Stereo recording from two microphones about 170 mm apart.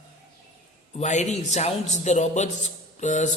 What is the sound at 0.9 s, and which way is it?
Speech, 45° left (ahead or behind).